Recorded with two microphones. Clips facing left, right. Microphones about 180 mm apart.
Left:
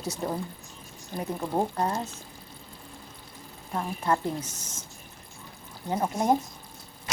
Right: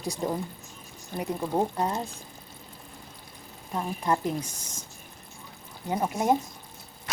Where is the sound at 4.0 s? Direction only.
15° right (ahead or behind).